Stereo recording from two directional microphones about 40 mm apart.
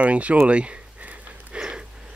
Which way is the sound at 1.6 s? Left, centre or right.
Right.